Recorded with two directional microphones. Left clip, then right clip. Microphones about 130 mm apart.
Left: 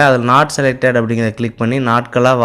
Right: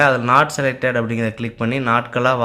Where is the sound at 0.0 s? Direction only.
35° left (ahead or behind).